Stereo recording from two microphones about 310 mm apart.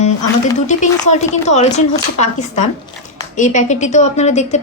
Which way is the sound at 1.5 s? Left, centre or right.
Left.